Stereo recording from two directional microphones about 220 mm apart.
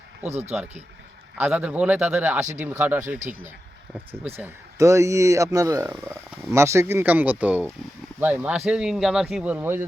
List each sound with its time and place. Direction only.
0.3 s speech: 30° right (ahead or behind)
1.4 s speech: 5° right (ahead or behind)